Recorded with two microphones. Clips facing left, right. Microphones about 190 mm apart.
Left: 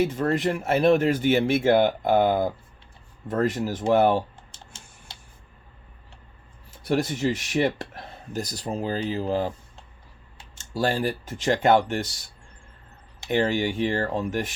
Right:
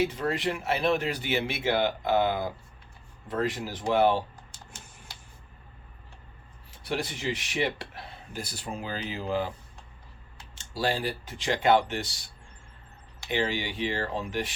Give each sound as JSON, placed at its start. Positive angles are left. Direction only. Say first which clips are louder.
{"t": 0.0, "sound": "speech", "louder": "left 5 dB", "side_deg": 50}
{"t": 6.8, "sound": "speech", "louder": "left 7 dB", "side_deg": 45}
{"t": 10.6, "sound": "speech", "louder": "left 4 dB", "side_deg": 50}